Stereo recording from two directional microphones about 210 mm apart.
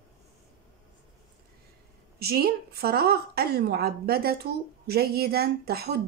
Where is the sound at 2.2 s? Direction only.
50° right (ahead or behind).